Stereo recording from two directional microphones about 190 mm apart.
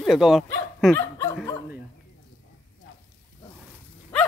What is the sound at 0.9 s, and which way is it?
Dog, 15° left (ahead or behind).